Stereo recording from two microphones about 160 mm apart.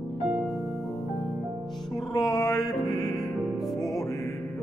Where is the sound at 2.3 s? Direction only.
25° left (ahead or behind).